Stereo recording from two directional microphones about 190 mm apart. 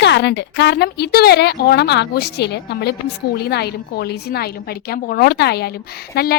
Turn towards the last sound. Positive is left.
turn(degrees=55)  # may be behind; listen again after turning